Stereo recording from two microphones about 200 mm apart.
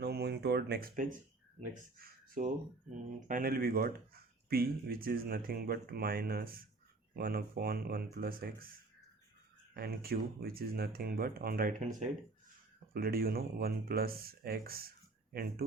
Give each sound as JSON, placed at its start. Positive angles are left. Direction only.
{"t": 0.0, "sound": "a sound", "side_deg": -55}
{"t": 1.7, "sound": "speech", "side_deg": -45}
{"t": 9.7, "sound": "speech", "side_deg": -50}